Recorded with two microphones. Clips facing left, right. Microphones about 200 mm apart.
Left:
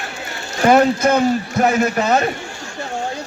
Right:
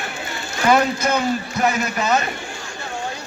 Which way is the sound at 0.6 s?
50° left (ahead or behind).